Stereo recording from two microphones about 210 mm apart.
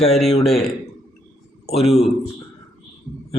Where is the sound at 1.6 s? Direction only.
30° left (ahead or behind).